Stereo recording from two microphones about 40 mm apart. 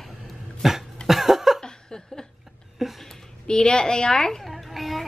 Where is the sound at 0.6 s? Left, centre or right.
Centre.